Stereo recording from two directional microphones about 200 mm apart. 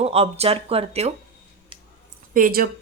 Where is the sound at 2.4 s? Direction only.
45° right (ahead or behind).